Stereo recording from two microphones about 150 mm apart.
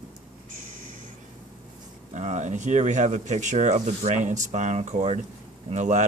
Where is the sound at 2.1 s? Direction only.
50° right (ahead or behind).